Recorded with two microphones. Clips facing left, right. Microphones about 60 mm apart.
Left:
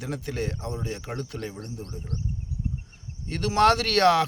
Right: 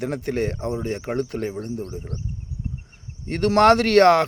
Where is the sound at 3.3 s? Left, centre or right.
Right.